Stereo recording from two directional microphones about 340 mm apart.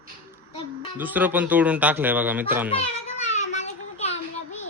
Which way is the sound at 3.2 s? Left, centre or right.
Centre.